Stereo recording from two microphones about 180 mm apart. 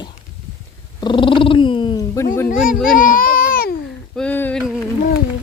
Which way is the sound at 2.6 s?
50° left (ahead or behind).